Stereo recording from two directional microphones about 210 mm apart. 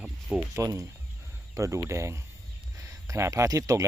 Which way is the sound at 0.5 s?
15° right (ahead or behind).